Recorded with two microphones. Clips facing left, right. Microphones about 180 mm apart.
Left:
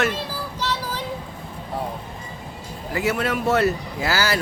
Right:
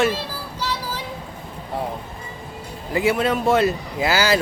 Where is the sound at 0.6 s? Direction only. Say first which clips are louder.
Even; 10° right (ahead or behind).